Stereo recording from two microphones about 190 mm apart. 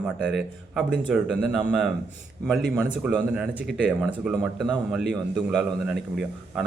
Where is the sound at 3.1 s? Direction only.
5° right (ahead or behind).